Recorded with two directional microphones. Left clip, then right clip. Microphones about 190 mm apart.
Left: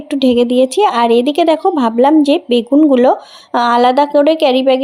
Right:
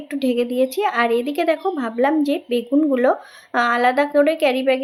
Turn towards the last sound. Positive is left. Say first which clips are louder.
# left 7 dB
turn(degrees=25)  # may be behind; listen again after turning